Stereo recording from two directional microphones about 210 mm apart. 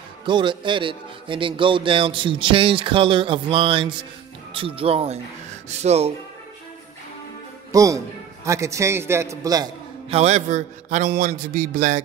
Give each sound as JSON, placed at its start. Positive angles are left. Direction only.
{"t": 0.2, "sound": "a man's voice", "side_deg": -20}
{"t": 7.7, "sound": "a man's voice", "side_deg": -15}
{"t": 10.0, "sound": "a man's voice", "side_deg": -30}